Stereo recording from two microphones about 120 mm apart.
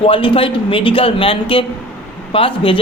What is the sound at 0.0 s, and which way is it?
A woman's voice, 45° left (ahead or behind).